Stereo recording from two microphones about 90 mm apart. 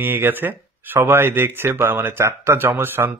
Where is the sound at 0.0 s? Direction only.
20° right (ahead or behind).